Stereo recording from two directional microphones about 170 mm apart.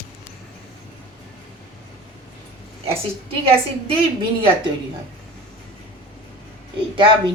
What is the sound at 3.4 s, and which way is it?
Speech, 35° right (ahead or behind).